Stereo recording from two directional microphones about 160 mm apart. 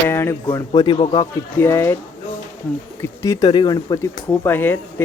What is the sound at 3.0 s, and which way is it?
Speech, 20° left (ahead or behind).